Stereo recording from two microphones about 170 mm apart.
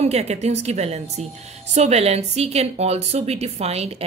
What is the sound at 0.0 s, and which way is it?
Speech, 40° right (ahead or behind).